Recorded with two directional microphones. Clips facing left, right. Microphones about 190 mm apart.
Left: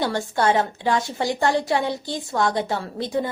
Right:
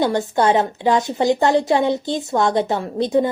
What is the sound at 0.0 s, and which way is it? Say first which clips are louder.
A woman's voice: right 4 dB; 20° right (ahead or behind).